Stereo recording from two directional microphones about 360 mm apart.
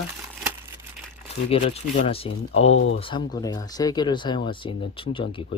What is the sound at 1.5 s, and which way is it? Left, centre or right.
Speech, centre.